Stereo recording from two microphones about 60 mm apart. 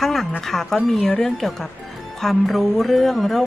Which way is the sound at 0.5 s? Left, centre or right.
Centre.